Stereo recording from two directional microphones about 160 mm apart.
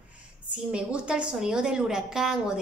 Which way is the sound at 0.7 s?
5° right (ahead or behind).